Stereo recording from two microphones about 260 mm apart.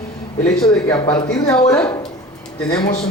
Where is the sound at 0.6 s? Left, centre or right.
Centre.